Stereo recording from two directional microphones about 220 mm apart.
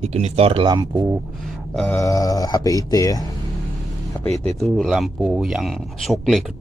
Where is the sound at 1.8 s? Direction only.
10° left (ahead or behind).